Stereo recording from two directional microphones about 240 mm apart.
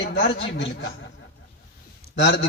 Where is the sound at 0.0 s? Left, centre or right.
Left.